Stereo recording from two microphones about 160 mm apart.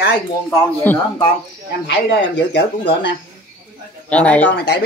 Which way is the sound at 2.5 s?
90° left.